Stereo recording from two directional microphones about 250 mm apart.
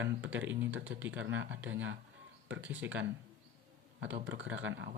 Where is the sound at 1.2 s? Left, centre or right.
Right.